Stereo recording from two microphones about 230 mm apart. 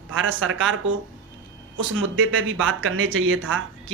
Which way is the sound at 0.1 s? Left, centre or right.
Right.